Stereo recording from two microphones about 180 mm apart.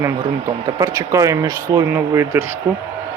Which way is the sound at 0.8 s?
20° right (ahead or behind).